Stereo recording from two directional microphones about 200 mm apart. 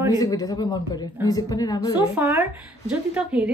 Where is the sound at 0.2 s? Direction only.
20° left (ahead or behind).